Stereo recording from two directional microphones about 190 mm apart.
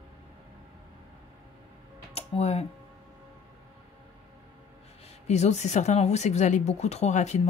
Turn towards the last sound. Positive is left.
turn(degrees=35)  # may be behind; listen again after turning